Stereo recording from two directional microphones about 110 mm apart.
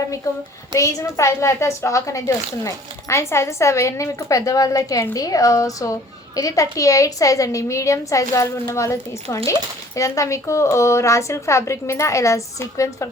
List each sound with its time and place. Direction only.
0.3 s a woman's voice: 30° left (ahead or behind)